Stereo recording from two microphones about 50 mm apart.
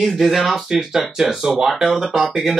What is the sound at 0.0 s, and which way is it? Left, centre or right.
Speech, centre.